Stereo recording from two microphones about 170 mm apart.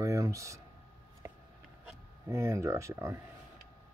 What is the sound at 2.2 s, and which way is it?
Speech, 15° right (ahead or behind).